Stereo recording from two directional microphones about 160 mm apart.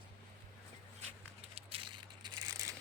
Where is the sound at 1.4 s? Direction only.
40° right (ahead or behind); by 2.7 s 20° right (ahead or behind).